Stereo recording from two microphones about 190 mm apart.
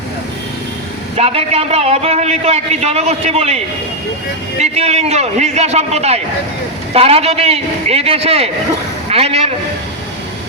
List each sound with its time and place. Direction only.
1.1 s a man's voice: 30° right (ahead or behind)
4.6 s a man's voice: 35° right (ahead or behind)